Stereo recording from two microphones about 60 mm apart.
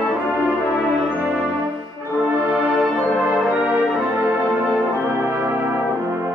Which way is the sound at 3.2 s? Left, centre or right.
Right.